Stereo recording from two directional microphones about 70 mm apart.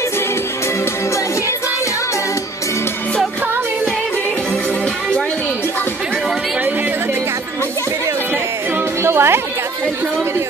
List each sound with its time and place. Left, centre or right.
9.0 s music: right